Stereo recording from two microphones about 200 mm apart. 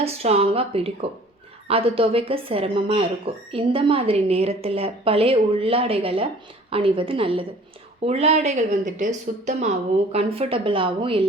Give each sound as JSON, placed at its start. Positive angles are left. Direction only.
{"t": 0.0, "sound": "a woman's voice", "side_deg": -30}